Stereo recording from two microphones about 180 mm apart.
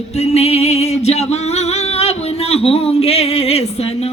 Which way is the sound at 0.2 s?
35° left (ahead or behind).